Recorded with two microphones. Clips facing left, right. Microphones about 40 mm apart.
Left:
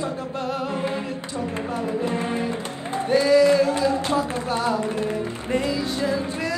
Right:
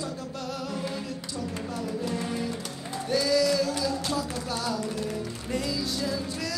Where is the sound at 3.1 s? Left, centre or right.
Left.